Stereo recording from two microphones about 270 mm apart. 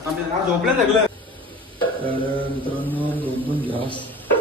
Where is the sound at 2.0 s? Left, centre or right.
Centre.